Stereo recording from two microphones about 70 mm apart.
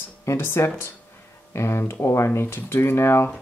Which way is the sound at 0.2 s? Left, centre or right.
Left.